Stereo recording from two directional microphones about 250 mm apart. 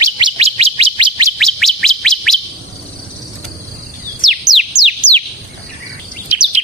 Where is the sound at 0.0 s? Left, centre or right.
Right.